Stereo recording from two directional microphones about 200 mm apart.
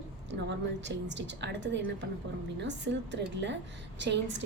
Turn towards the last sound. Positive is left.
turn(degrees=-60)  # may be behind; listen again after turning